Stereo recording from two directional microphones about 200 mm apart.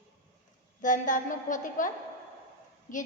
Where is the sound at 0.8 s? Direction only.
40° left (ahead or behind).